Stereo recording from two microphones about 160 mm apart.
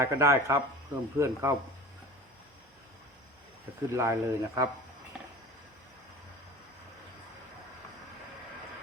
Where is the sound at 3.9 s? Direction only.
20° right (ahead or behind).